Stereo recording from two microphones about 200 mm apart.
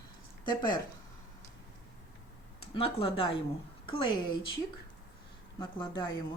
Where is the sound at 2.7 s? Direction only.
30° left (ahead or behind).